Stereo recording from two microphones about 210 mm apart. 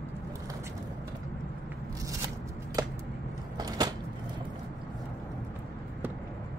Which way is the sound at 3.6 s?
20° right (ahead or behind).